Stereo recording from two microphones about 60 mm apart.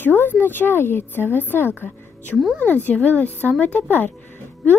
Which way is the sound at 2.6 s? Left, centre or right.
Left.